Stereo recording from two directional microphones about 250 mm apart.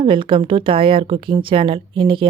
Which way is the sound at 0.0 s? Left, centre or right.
Centre.